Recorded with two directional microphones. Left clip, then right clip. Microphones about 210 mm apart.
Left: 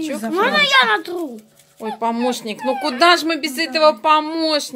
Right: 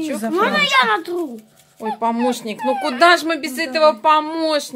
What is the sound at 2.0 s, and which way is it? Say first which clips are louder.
Speech: even; 5° left (ahead or behind).